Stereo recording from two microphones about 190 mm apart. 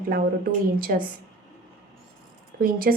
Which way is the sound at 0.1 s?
50° right (ahead or behind).